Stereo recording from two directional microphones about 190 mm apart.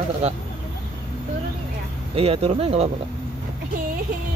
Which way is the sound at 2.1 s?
30° right (ahead or behind).